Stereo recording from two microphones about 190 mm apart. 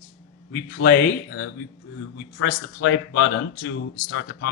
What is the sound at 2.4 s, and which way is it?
Speech, 80° left.